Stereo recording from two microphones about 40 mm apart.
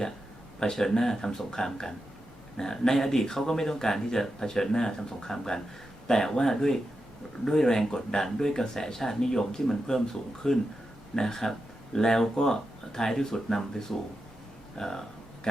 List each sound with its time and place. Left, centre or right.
0.6 s speech: centre